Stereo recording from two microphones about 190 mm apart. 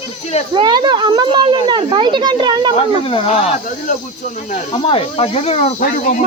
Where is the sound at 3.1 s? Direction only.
30° left (ahead or behind).